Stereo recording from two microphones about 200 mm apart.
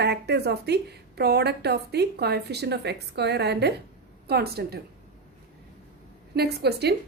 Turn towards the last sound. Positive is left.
turn(degrees=-55)  # may be behind; listen again after turning